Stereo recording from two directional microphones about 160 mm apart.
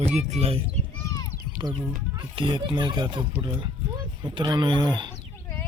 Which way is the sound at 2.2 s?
30° right (ahead or behind).